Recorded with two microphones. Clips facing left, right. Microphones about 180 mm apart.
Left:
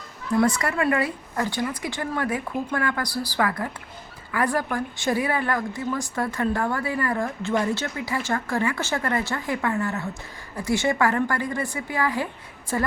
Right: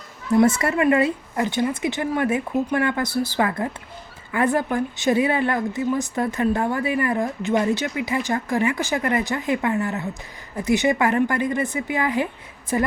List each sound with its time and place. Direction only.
0.3 s a woman's voice: 25° right (ahead or behind)